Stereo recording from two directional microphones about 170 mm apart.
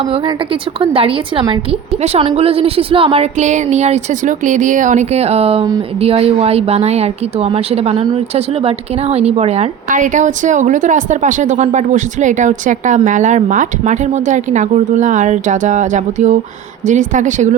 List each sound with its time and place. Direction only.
0.8 s a woman's voice: 35° right (ahead or behind)